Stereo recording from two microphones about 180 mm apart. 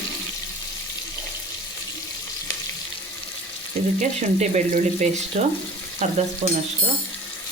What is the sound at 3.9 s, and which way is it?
Frying, 40° right (ahead or behind).